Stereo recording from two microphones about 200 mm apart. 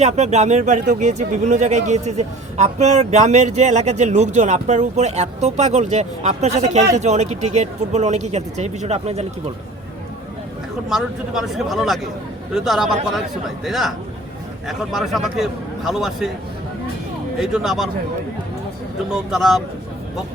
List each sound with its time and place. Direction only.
0.0 s speech: 35° right (ahead or behind)
10.8 s a man's voice: centre (ahead or behind)
17.4 s a man's voice: centre (ahead or behind)
19.1 s a man's voice: centre (ahead or behind)